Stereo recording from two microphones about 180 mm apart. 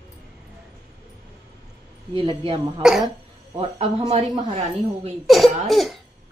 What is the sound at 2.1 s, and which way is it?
Speech, 30° right (ahead or behind).